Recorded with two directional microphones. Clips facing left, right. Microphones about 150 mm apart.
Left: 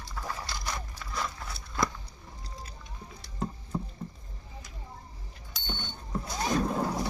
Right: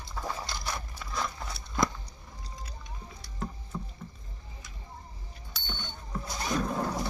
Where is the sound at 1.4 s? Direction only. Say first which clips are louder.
Right 3 dB; 20° right (ahead or behind).